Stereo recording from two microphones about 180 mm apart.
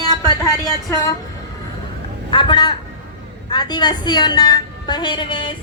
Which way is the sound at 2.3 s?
25° left (ahead or behind).